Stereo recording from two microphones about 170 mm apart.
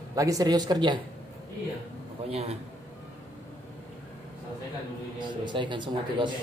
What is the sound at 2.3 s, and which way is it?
Speech, 35° right (ahead or behind).